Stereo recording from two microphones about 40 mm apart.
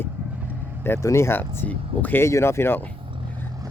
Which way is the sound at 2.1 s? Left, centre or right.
Left.